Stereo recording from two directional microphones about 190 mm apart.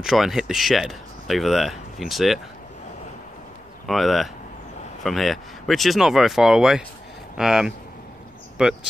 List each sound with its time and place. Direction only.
0.0 s speech: centre (ahead or behind)
3.8 s speech: centre (ahead or behind)